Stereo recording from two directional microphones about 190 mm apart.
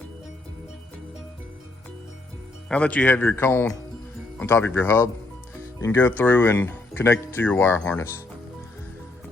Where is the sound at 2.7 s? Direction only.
5° left (ahead or behind).